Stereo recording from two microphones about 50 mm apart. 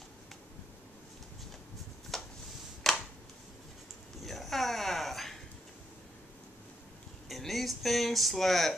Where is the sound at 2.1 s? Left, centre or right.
Centre.